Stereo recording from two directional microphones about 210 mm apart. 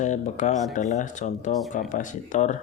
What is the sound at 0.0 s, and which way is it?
Speech, 35° left (ahead or behind).